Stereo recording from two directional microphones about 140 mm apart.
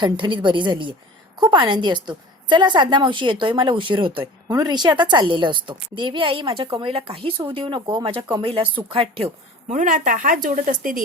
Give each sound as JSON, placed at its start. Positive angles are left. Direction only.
{"t": 0.0, "sound": "a woman's voice", "side_deg": -35}
{"t": 9.7, "sound": "speech", "side_deg": -70}